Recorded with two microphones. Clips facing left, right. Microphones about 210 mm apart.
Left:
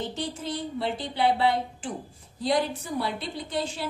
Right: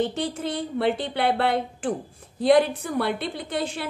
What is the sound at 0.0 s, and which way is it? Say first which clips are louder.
A woman's voice: right 6 dB; 55° right (ahead or behind).